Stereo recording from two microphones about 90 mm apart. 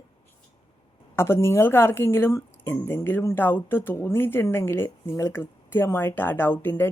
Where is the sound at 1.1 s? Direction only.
30° left (ahead or behind).